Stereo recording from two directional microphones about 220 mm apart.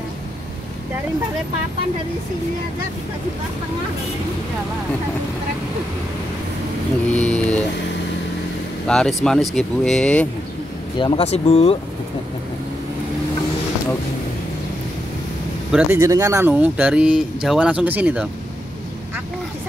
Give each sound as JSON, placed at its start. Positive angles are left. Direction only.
{"t": 7.1, "sound": "speech", "side_deg": 5}
{"t": 8.8, "sound": "speech", "side_deg": 0}
{"t": 11.0, "sound": "speech", "side_deg": 20}
{"t": 15.7, "sound": "speech", "side_deg": -10}